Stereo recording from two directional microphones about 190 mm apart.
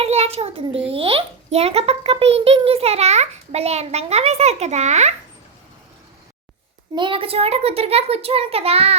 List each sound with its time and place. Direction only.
0.0 s a child's voice: 35° right (ahead or behind)
6.9 s a child's voice: 25° right (ahead or behind)